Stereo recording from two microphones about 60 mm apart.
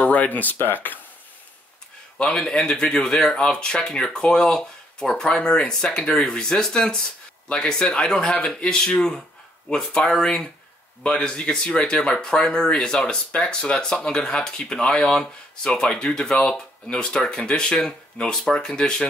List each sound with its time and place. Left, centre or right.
0.0 s speech: left
2.1 s speech: centre